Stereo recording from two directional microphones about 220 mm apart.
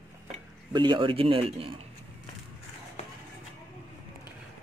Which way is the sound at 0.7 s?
20° right (ahead or behind).